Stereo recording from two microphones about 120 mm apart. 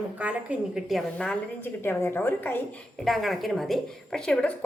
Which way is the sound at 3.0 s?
Centre (ahead or behind).